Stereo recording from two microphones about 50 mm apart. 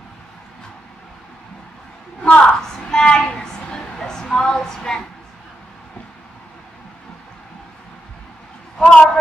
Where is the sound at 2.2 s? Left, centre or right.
Left.